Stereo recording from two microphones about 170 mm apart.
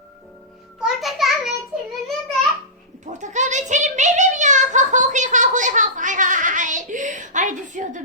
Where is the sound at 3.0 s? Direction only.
45° right (ahead or behind).